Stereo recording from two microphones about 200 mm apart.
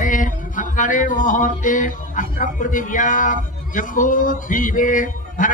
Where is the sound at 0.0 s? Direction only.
40° left (ahead or behind).